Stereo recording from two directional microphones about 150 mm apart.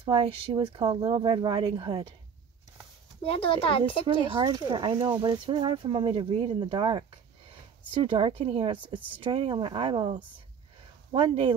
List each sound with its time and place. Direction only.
0.0 s speech: 35° right (ahead or behind)
3.3 s speech: 35° left (ahead or behind)
4.3 s speech: 30° right (ahead or behind)